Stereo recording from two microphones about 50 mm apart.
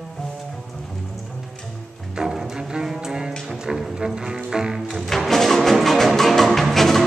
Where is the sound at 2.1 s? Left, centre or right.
Centre.